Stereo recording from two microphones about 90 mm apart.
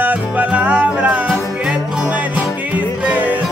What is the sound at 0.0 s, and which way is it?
Music, 15° right (ahead or behind).